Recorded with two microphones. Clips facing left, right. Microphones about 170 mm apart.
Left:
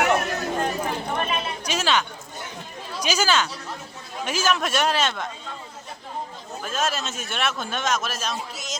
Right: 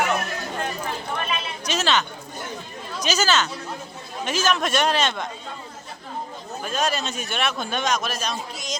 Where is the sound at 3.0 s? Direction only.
10° left (ahead or behind).